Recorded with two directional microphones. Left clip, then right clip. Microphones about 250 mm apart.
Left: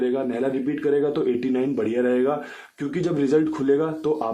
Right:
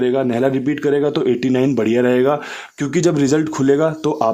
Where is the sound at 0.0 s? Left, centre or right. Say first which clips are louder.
Right 7 dB; right.